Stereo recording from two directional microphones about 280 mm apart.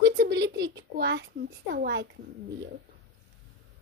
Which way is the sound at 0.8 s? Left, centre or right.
Right.